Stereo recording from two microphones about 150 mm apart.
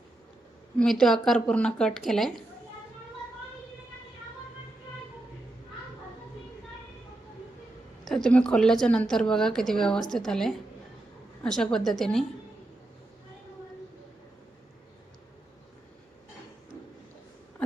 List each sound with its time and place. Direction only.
0.8 s a woman's voice: 5° left (ahead or behind)
8.0 s a woman's voice: 5° left (ahead or behind)